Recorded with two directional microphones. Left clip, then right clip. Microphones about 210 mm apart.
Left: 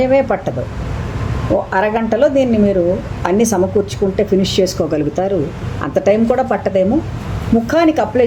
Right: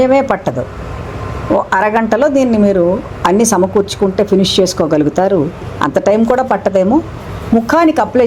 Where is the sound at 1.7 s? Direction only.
15° right (ahead or behind).